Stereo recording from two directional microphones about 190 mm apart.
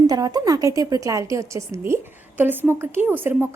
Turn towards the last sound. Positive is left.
turn(degrees=-10)  # may be behind; listen again after turning